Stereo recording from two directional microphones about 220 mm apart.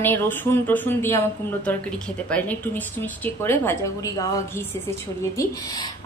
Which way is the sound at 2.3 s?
5° left (ahead or behind).